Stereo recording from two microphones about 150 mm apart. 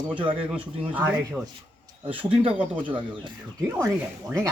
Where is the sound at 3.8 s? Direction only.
20° right (ahead or behind).